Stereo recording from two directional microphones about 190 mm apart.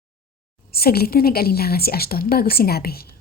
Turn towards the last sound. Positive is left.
turn(degrees=55)  # may be behind; listen again after turning